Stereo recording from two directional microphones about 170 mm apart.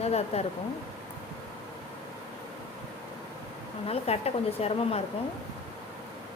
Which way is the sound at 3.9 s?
40° left (ahead or behind).